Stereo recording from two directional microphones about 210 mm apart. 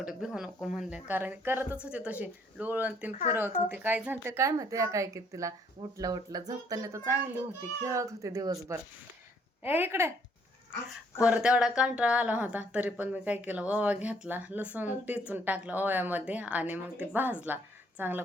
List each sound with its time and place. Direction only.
0.0 s speech: 5° right (ahead or behind)
11.2 s speech: 5° right (ahead or behind)